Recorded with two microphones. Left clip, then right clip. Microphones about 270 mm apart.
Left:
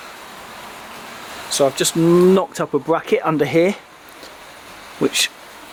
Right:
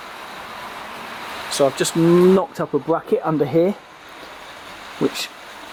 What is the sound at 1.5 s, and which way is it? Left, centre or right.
Speech, centre.